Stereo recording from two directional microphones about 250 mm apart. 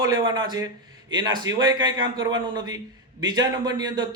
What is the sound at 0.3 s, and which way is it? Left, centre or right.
A man's voice, centre.